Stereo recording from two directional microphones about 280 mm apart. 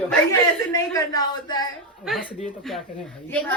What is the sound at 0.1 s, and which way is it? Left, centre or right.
A woman's voice, centre.